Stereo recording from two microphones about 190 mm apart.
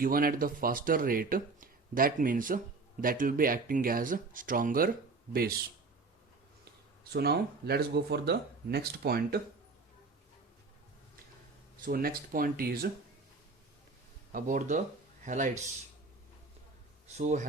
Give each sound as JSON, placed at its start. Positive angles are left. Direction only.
{"t": 0.0, "sound": "speech", "side_deg": -50}
{"t": 7.0, "sound": "speech", "side_deg": -55}
{"t": 11.9, "sound": "speech", "side_deg": -50}
{"t": 14.3, "sound": "a man's voice", "side_deg": -45}